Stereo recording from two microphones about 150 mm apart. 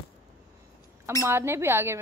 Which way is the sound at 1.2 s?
15° right (ahead or behind).